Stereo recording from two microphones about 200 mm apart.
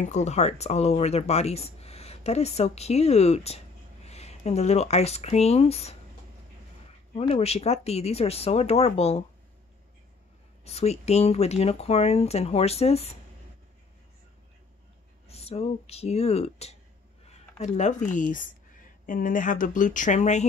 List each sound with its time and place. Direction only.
0.0 s speech: 35° left (ahead or behind)
7.2 s speech: 30° left (ahead or behind)
10.6 s speech: 30° left (ahead or behind)
15.2 s speech: 30° left (ahead or behind)